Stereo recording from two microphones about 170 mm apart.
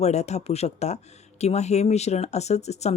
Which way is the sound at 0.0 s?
40° left (ahead or behind).